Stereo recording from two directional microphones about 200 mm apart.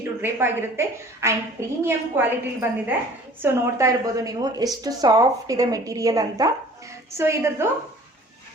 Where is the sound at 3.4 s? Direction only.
15° right (ahead or behind).